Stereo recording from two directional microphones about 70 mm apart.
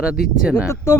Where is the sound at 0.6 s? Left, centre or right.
Left.